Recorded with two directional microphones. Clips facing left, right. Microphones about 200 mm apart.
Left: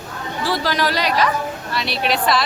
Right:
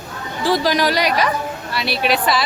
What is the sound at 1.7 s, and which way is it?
Speech, 5° right (ahead or behind).